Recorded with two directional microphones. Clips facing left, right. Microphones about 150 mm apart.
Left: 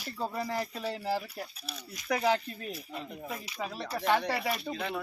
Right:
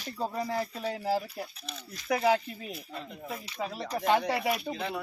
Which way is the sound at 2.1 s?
10° right (ahead or behind).